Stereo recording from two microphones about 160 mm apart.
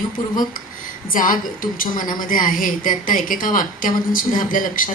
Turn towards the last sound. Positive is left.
turn(degrees=60)  # may be behind; listen again after turning